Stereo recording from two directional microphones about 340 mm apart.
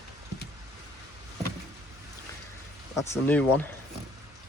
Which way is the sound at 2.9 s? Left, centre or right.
Centre.